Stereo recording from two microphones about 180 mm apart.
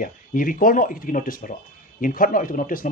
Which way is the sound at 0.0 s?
50° left (ahead or behind).